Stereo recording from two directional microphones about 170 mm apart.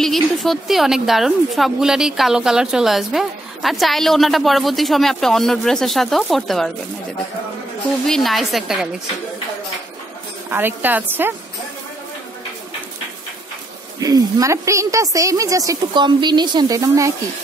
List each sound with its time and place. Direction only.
0.0 s a woman's voice: centre (ahead or behind)
8.1 s a woman's voice: centre (ahead or behind)
10.5 s a woman's voice: 10° right (ahead or behind)
13.9 s a woman's voice: 20° right (ahead or behind)